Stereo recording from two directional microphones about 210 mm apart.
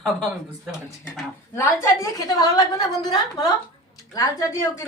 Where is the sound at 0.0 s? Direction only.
Centre (ahead or behind).